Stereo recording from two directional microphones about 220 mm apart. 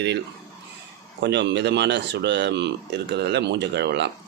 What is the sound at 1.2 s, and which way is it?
Speech, 50° right (ahead or behind).